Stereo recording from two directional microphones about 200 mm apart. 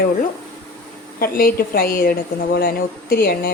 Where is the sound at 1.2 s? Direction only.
45° left (ahead or behind).